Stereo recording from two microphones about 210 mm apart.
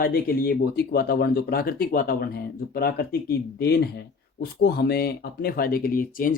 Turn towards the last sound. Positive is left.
turn(degrees=40)  # may be behind; listen again after turning